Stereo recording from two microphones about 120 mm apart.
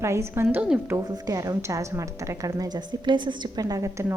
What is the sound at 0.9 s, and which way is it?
A woman's voice, 30° right (ahead or behind).